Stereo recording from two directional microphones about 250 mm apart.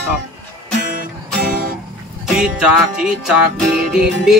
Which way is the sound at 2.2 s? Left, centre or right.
Centre.